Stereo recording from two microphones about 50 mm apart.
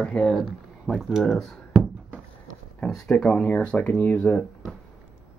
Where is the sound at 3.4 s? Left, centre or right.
Left.